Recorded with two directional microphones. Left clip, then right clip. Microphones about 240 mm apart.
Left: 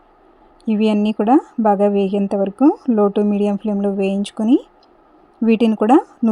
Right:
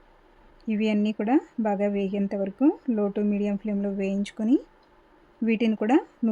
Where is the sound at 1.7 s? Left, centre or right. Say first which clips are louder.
Left 11 dB; left.